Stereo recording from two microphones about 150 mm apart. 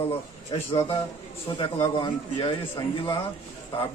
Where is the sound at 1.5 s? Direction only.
25° left (ahead or behind).